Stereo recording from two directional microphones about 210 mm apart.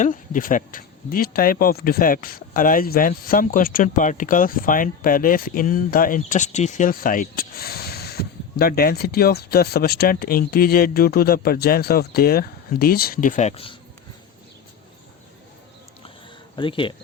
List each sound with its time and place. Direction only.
0.0 s speech: 40° left (ahead or behind)
16.6 s speech: 25° left (ahead or behind)